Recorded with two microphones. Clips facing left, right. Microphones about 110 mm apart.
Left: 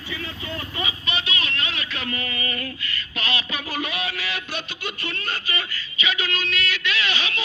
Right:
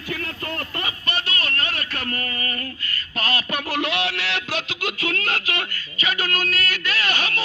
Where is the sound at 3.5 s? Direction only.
70° right (ahead or behind).